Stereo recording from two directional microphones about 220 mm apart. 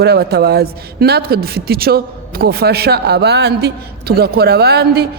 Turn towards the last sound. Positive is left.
turn(degrees=-45)  # may be behind; listen again after turning